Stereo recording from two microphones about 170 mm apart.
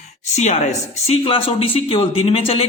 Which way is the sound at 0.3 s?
40° left (ahead or behind).